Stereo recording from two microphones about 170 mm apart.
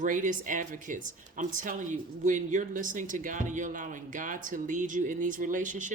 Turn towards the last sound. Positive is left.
turn(degrees=-50)  # may be behind; listen again after turning